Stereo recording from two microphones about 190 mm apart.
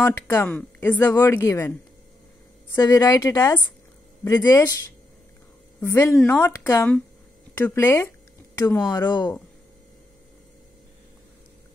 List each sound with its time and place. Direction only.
0.0 s speech: 10° left (ahead or behind)
2.7 s speech: 15° left (ahead or behind)
5.8 s a woman's voice: 15° left (ahead or behind)